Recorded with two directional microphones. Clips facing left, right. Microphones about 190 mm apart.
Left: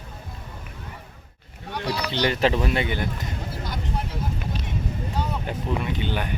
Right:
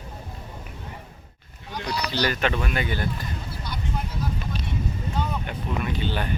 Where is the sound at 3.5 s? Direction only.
45° left (ahead or behind).